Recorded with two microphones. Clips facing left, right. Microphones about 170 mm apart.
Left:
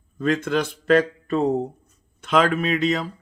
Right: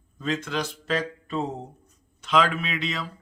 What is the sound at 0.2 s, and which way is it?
Speech, 55° left (ahead or behind).